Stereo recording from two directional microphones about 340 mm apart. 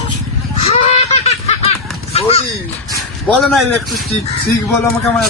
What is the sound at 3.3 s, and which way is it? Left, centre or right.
Speech, centre.